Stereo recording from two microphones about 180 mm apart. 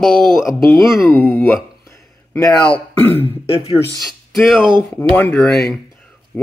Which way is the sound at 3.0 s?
10° left (ahead or behind).